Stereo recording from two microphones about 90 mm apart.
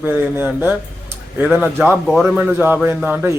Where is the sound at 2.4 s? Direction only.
20° right (ahead or behind).